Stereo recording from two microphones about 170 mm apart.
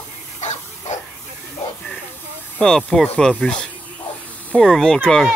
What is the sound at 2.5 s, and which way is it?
Speech, 5° left (ahead or behind).